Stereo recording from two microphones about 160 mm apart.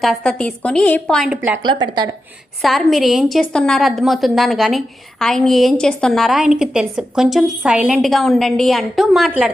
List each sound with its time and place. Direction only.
0.0 s a woman's voice: centre (ahead or behind)
1.6 s speech: 25° right (ahead or behind)
2.6 s a woman's voice: centre (ahead or behind)